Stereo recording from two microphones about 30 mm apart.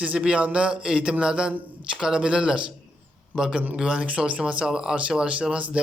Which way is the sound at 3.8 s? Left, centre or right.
Right.